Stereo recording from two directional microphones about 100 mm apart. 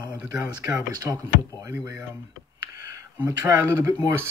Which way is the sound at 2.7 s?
35° right (ahead or behind).